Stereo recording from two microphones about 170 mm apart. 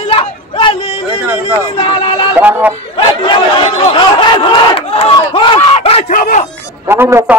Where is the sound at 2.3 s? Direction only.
10° right (ahead or behind).